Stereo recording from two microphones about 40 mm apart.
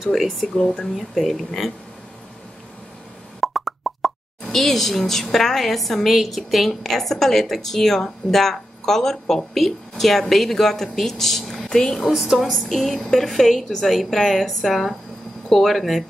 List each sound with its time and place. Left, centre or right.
0.0 s a woman's voice: centre
0.6 s speech: centre
0.9 s a woman's voice: centre
3.3 s speech: centre
12.1 s a woman's voice: centre
12.5 s a woman's voice: centre